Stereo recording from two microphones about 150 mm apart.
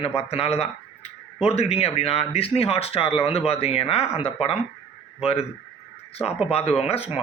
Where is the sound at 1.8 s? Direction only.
45° left (ahead or behind).